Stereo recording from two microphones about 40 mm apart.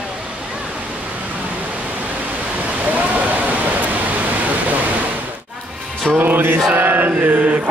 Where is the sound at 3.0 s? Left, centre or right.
Right.